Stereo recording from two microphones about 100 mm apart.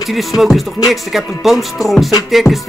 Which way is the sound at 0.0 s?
Centre (ahead or behind).